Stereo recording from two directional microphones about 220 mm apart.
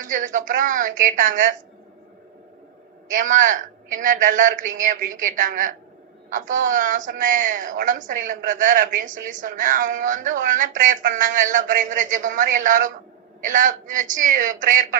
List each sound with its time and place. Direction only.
0.0 s a woman's voice: 35° right (ahead or behind)
3.1 s a woman's voice: 35° right (ahead or behind)